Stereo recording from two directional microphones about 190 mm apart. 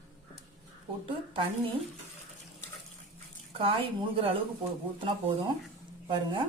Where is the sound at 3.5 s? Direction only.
30° right (ahead or behind).